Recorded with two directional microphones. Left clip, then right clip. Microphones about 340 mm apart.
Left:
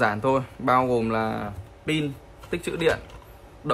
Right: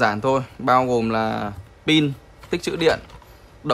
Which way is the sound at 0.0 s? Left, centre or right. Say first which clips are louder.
Right 3 dB; centre.